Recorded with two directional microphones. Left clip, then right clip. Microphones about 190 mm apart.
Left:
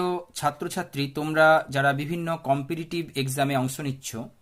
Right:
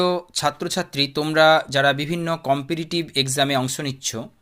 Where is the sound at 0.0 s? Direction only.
25° right (ahead or behind).